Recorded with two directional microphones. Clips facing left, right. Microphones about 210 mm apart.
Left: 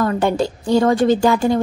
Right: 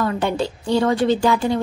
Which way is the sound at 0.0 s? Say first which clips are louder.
Left 3 dB; 45° left (ahead or behind).